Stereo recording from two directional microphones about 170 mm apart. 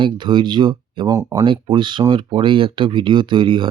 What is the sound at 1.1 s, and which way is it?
Speech, 15° right (ahead or behind).